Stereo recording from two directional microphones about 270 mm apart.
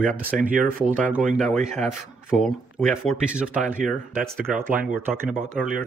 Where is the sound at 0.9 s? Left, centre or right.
Centre.